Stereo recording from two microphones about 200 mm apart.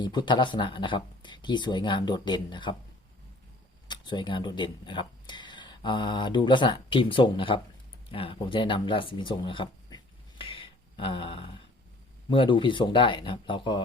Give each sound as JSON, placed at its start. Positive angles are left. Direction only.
{"t": 0.0, "sound": "speech", "side_deg": 20}
{"t": 3.8, "sound": "speech", "side_deg": 20}